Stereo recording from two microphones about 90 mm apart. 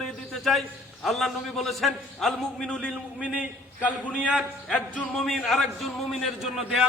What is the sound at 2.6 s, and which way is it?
Speech, 15° left (ahead or behind).